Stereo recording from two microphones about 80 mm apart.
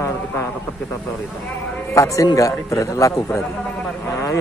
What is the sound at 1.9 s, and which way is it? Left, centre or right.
A man's voice, left.